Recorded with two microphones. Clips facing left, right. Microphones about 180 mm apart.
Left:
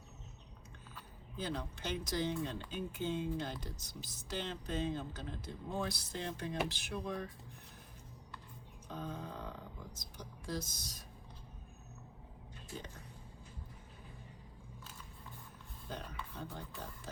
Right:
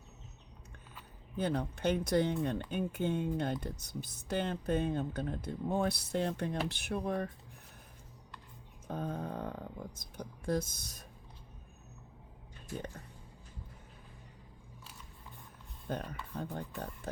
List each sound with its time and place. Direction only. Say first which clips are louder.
1.4 s speech: right 7 dB; 60° right (ahead or behind)
8.9 s speech: right 6 dB; 55° right (ahead or behind)
15.9 s speech: right 7 dB; 55° right (ahead or behind)